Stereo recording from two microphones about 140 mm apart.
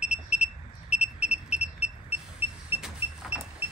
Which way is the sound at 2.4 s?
10° right (ahead or behind).